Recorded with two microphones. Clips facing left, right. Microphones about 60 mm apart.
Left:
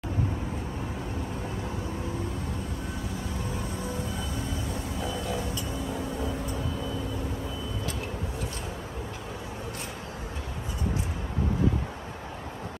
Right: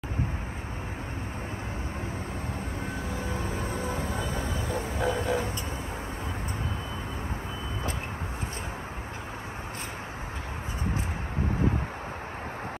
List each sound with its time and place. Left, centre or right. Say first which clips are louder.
3.0 s music: right 2 dB; right